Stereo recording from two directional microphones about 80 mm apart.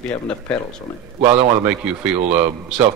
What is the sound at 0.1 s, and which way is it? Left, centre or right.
Speech, centre.